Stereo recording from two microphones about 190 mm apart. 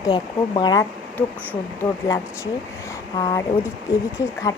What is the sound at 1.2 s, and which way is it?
Speech, 10° left (ahead or behind).